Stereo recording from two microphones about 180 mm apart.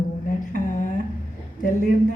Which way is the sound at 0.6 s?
45° left (ahead or behind).